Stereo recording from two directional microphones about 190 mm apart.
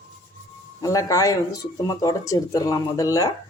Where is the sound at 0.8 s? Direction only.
15° left (ahead or behind).